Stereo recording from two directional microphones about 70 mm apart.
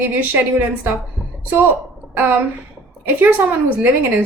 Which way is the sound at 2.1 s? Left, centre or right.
Right.